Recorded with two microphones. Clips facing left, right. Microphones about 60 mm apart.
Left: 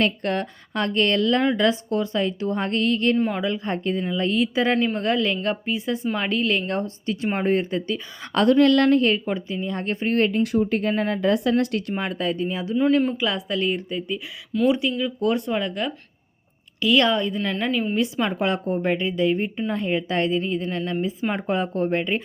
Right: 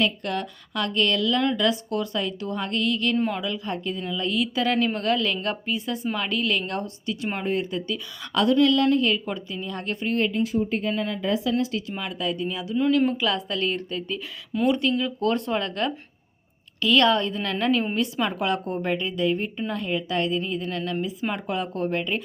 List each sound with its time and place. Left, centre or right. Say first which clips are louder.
0.0 s a woman's voice: left 3 dB; left
9.0 s a woman's voice: left 3 dB; left
9.2 s speech: left 4 dB; left
10.2 s speech: left 4 dB; left
10.4 s speech: left 3 dB; left
11.9 s a woman's voice: left 3 dB; left
13.1 s a woman's voice: even; centre
17.9 s a woman's voice: left 2 dB; centre